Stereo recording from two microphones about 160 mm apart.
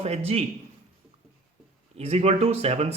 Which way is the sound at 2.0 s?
40° right (ahead or behind).